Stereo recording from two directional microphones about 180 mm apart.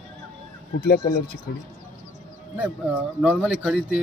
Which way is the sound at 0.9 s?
55° left (ahead or behind).